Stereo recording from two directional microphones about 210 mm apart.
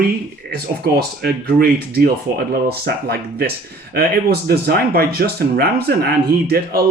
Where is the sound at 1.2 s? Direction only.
45° right (ahead or behind).